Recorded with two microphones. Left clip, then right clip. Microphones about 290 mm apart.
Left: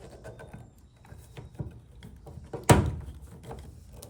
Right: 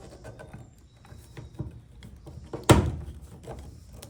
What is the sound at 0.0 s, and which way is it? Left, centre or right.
Horse, centre.